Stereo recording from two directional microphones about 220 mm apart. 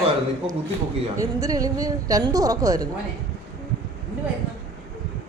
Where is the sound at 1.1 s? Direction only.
15° right (ahead or behind).